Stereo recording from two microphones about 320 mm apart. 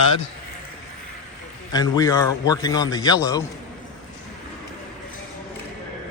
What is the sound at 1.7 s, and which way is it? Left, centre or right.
A man's voice, centre.